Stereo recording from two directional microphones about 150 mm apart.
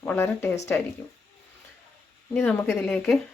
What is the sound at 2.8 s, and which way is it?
Speech, 5° left (ahead or behind).